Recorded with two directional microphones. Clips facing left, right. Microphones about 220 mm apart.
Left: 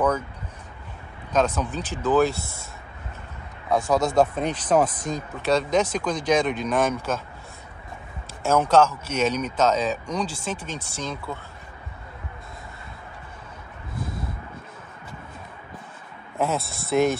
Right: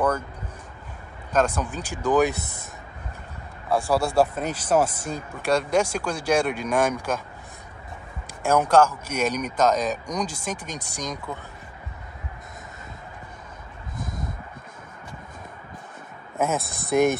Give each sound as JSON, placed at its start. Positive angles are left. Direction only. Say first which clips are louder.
{"t": 1.3, "sound": "speech", "louder": "even", "side_deg": -10}
{"t": 3.7, "sound": "speech", "louder": "left 1 dB", "side_deg": -10}
{"t": 8.4, "sound": "speech", "louder": "even", "side_deg": -10}
{"t": 16.5, "sound": "speech", "louder": "right 1 dB", "side_deg": -15}